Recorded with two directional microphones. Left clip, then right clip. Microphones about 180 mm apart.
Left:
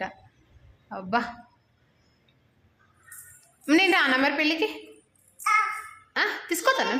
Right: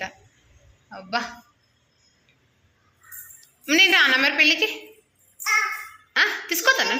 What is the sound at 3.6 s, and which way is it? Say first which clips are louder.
A woman's voice: right 4 dB; 30° left (ahead or behind).